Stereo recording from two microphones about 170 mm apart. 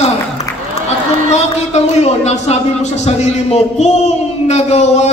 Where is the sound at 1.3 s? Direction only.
40° left (ahead or behind).